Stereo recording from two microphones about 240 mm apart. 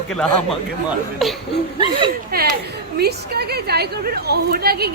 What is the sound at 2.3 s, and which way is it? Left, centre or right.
A woman's voice, right.